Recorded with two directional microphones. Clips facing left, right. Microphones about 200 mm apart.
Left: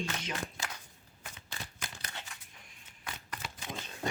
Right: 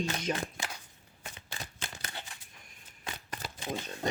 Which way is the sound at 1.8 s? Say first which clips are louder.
Right 2 dB; 35° right (ahead or behind).